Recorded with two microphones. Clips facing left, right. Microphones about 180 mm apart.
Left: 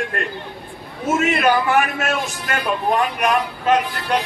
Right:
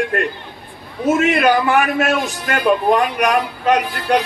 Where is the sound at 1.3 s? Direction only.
35° right (ahead or behind).